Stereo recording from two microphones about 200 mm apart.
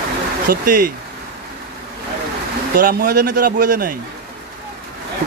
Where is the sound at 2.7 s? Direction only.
45° right (ahead or behind).